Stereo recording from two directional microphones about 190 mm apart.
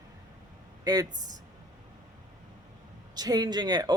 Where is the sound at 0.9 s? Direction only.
20° right (ahead or behind).